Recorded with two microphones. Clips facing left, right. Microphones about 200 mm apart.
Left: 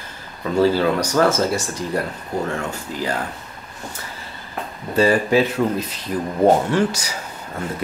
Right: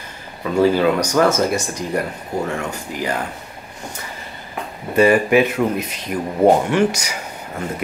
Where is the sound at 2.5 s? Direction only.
15° right (ahead or behind).